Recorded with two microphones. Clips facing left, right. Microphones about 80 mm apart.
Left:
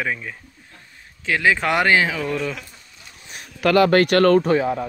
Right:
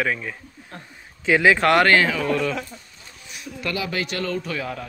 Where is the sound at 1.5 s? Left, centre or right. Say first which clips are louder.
Right 1 dB; centre.